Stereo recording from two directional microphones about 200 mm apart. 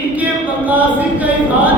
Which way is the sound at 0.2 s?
10° right (ahead or behind).